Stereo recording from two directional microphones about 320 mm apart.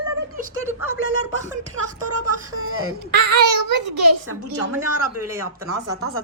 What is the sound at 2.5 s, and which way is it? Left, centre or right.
Speech, right.